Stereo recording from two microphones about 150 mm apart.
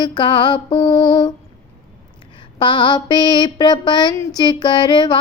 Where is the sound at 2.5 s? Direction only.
30° left (ahead or behind).